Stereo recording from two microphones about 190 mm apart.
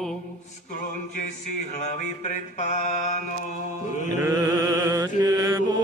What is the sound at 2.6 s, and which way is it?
Mantra, 40° left (ahead or behind).